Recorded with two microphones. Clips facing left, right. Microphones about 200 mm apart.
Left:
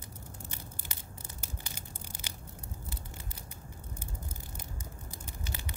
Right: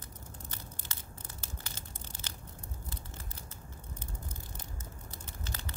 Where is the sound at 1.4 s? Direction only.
10° left (ahead or behind).